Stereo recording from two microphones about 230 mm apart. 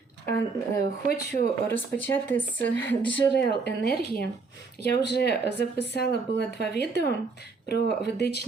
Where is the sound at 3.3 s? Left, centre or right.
Left.